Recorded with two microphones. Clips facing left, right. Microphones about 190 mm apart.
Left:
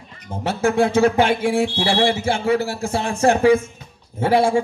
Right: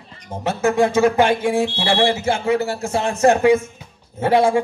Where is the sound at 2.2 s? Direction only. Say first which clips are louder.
Even; 30° left (ahead or behind).